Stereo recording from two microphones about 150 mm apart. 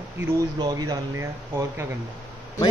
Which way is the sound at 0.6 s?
25° right (ahead or behind).